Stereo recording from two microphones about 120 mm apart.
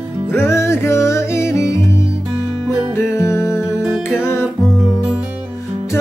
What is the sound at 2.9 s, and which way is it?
Music, 20° left (ahead or behind).